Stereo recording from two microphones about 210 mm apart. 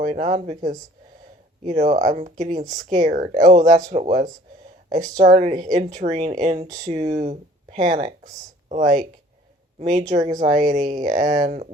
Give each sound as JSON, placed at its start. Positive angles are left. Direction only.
{"t": 0.0, "sound": "speech", "side_deg": -35}
{"t": 1.6, "sound": "speech", "side_deg": -35}
{"t": 10.1, "sound": "speech", "side_deg": -35}